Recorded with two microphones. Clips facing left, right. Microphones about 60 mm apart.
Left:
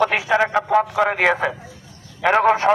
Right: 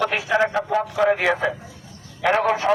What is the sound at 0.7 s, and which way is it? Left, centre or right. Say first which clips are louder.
Speech: left 4 dB; left.